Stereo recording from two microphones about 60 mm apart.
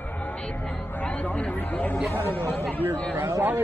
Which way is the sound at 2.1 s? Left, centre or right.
Left.